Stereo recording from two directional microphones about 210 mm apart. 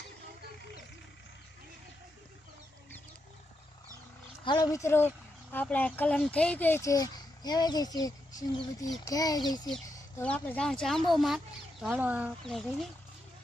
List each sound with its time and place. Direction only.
4.4 s speech: 20° left (ahead or behind)
10.2 s speech: 5° left (ahead or behind)